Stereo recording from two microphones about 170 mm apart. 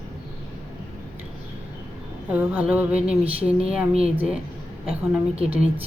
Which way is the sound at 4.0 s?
35° right (ahead or behind).